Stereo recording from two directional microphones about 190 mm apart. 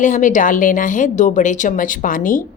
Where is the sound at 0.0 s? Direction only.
40° left (ahead or behind).